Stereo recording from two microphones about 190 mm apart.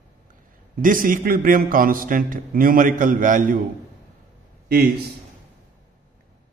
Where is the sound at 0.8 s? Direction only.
45° right (ahead or behind).